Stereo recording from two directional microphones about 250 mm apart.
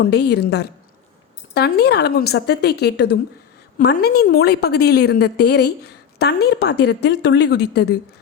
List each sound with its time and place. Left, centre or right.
0.0 s a woman's voice: left